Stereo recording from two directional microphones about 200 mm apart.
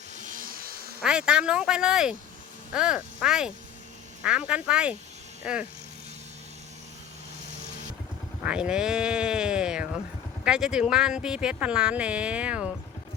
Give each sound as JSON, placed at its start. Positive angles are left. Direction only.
{"t": 0.2, "sound": "a sound", "side_deg": -40}
{"t": 1.0, "sound": "speech", "side_deg": -5}
{"t": 8.4, "sound": "speech", "side_deg": -5}